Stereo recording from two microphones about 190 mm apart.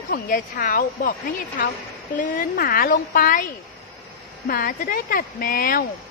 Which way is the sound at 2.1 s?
45° left (ahead or behind).